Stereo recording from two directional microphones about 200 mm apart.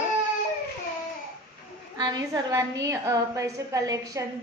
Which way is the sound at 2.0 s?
20° right (ahead or behind).